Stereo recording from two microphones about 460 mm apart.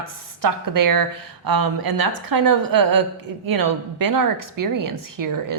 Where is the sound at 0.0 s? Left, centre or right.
Right.